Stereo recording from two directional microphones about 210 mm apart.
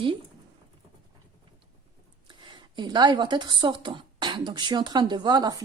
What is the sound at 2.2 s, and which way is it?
A woman's voice, 20° right (ahead or behind).